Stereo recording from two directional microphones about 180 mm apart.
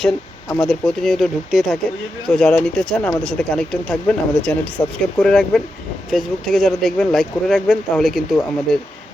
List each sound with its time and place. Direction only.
0.0 s speech: 5° left (ahead or behind)